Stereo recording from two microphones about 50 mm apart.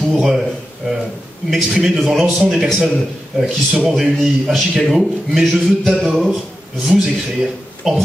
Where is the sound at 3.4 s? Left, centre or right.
Centre.